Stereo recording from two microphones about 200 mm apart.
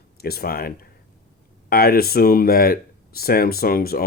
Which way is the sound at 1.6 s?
50° left (ahead or behind).